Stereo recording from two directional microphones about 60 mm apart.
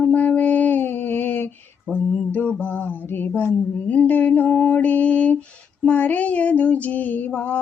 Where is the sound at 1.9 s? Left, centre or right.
Left.